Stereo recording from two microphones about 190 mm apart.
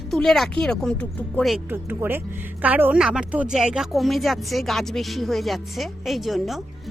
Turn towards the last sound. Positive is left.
turn(degrees=0)  # may be behind; listen again after turning